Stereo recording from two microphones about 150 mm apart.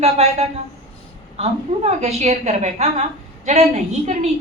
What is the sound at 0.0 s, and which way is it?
A woman's voice, 45° right (ahead or behind).